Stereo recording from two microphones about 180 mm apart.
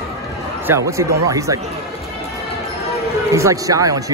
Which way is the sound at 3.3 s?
15° right (ahead or behind).